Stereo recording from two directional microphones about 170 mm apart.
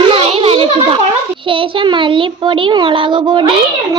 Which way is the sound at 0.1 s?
35° right (ahead or behind).